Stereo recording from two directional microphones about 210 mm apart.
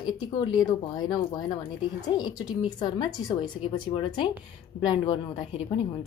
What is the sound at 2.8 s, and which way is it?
A woman's voice, 20° left (ahead or behind).